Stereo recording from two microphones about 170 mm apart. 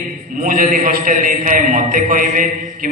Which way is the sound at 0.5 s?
60° right (ahead or behind).